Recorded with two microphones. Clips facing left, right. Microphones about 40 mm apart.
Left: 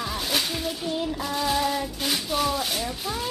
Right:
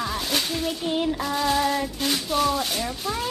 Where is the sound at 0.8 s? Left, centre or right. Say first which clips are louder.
Right 4 dB; right.